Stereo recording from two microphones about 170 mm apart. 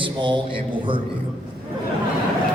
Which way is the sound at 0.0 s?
30° right (ahead or behind).